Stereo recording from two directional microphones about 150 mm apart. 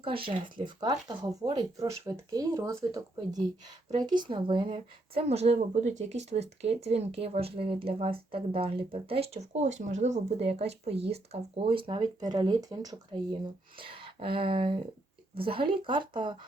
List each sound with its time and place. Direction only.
0.0 s a woman's voice: 35° right (ahead or behind)